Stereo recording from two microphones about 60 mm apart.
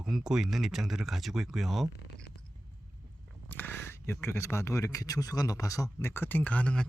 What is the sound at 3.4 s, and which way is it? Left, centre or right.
Speech, left.